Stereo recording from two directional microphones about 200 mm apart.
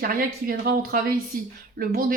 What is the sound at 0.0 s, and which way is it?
Speech, 45° right (ahead or behind).